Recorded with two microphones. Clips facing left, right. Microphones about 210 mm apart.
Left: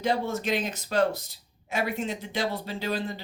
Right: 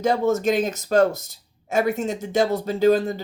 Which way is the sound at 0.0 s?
45° right (ahead or behind).